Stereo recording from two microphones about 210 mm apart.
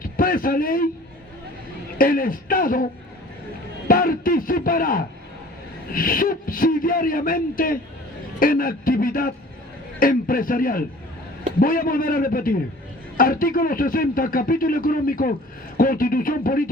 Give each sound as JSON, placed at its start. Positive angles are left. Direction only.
{"t": 0.0, "sound": "a man's voice", "side_deg": 40}
{"t": 2.0, "sound": "speech", "side_deg": 45}
{"t": 3.8, "sound": "speech", "side_deg": 45}